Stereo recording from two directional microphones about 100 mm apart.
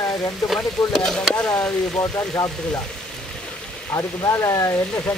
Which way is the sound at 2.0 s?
30° left (ahead or behind).